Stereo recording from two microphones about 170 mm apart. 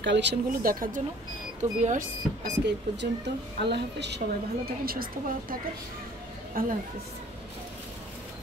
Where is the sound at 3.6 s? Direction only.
80° right; by 5.5 s 60° right (ahead or behind).